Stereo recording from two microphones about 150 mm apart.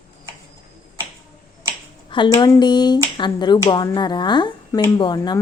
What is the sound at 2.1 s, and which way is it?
Speech, 30° left (ahead or behind).